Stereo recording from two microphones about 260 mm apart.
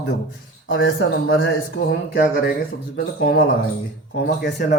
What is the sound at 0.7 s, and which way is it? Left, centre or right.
A man's voice, left.